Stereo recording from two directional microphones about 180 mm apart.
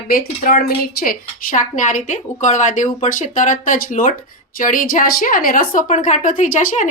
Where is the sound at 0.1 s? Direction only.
50° left (ahead or behind).